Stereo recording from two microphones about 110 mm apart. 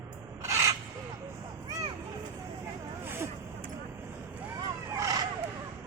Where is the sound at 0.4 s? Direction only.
30° right (ahead or behind).